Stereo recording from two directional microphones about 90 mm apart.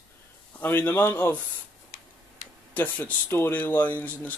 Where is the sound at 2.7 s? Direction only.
20° left (ahead or behind).